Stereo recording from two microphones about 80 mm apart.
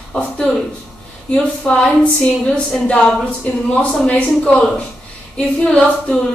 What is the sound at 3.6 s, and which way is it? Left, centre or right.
A woman's voice, centre.